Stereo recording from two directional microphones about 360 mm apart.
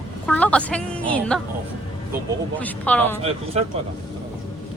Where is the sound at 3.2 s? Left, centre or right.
Centre.